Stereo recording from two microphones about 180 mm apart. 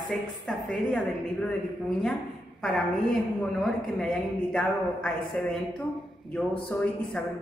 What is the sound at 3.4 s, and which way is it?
A woman's voice, 5° left (ahead or behind).